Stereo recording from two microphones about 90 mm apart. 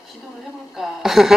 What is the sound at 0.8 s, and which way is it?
Speech, 5° right (ahead or behind).